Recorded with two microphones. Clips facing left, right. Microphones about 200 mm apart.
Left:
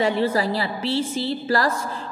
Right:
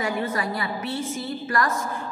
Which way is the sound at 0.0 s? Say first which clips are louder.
Left 6 dB; 30° left (ahead or behind).